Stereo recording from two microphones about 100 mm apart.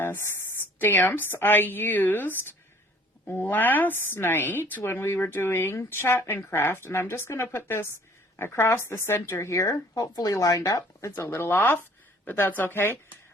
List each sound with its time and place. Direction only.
0.0 s a woman's voice: 25° left (ahead or behind)